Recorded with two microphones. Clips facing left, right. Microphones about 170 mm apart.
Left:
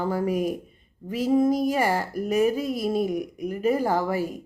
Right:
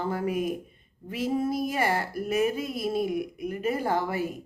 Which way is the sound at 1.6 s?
35° left (ahead or behind).